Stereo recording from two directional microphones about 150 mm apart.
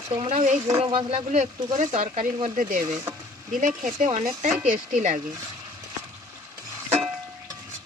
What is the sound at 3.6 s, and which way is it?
Speech, 60° right (ahead or behind).